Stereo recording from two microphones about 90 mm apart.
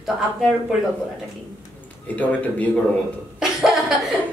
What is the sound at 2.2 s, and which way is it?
Speech, 15° left (ahead or behind).